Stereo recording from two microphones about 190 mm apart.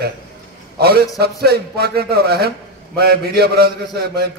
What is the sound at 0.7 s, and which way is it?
A man's voice, 55° right (ahead or behind).